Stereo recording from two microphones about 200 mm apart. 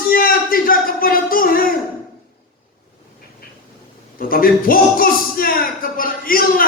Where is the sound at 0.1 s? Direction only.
45° left (ahead or behind).